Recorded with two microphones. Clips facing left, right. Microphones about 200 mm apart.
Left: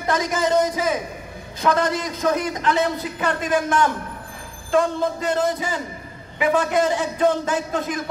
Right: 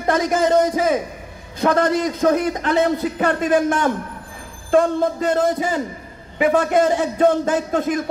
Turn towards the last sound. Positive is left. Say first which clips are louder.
# right 4 dB
turn(degrees=-50)  # may be behind; listen again after turning